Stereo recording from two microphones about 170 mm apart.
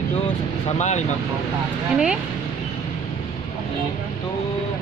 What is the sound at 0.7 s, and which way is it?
Speech, 45° left (ahead or behind).